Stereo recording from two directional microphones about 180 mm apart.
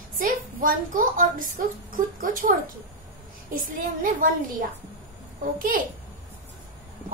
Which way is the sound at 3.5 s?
50° right (ahead or behind).